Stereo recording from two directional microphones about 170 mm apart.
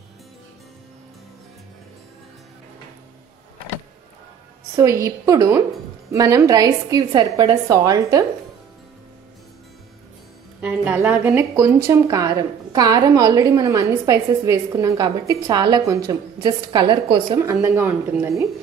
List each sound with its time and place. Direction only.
4.7 s speech: 20° right (ahead or behind)
10.6 s speech: 10° right (ahead or behind); by 17.4 s 25° right (ahead or behind)
17.4 s speech: 15° right (ahead or behind)